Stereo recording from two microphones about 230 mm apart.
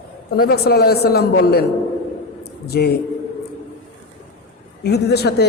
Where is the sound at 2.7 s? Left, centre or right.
Left.